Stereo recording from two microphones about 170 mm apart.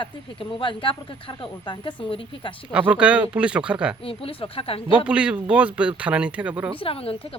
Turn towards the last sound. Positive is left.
turn(degrees=35)  # may be behind; listen again after turning